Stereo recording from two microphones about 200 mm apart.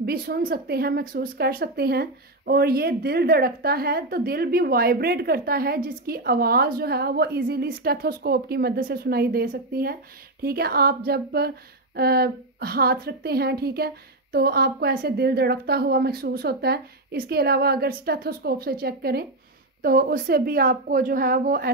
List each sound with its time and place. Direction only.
0.0 s speech: 50° right (ahead or behind)